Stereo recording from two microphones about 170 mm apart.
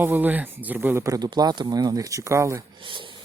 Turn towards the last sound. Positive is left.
turn(degrees=-30)  # may be behind; listen again after turning